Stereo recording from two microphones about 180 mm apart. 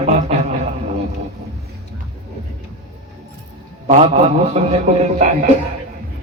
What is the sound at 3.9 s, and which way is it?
A man's voice, 35° right (ahead or behind).